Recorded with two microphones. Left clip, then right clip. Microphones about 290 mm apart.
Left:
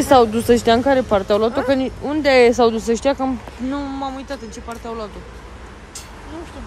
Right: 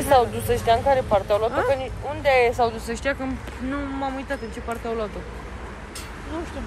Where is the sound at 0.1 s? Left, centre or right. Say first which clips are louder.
Left 6 dB; left; by 5.0 s centre.